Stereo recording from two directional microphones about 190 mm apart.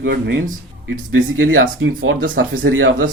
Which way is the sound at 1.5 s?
85° right.